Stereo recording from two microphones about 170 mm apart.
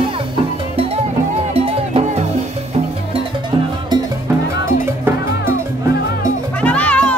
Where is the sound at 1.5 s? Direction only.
35° right (ahead or behind).